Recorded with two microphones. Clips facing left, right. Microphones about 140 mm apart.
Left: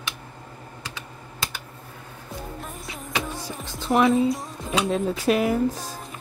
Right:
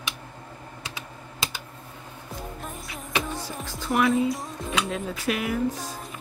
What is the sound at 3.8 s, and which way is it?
Music, 25° left (ahead or behind).